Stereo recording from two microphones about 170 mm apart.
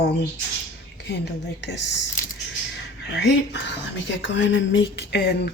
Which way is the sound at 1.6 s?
90° left.